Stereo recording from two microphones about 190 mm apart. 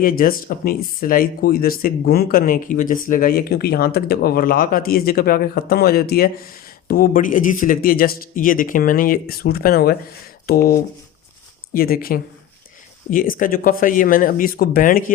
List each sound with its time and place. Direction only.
0.0 s speech: 50° left (ahead or behind)